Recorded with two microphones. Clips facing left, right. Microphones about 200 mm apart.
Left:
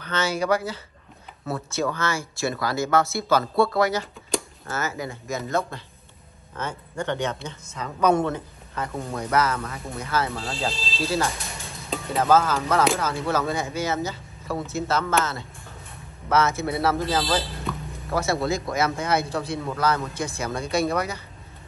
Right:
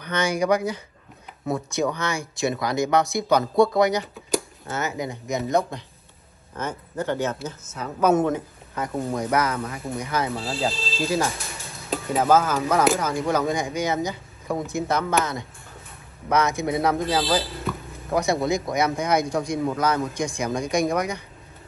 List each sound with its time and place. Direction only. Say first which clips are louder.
0.0 s speech: right 2 dB; 15° right (ahead or behind)
11.9 s speech: right 1 dB; 5° right (ahead or behind)
16.3 s speech: even; 15° right (ahead or behind)
17.7 s a sound: right 2 dB; centre (ahead or behind)
18.1 s speech: right 2 dB; 15° right (ahead or behind)